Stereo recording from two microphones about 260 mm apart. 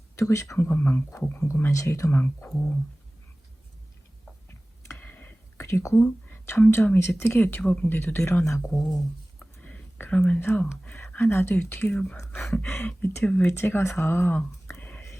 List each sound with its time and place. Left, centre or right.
0.2 s speech: centre
4.4 s speech: centre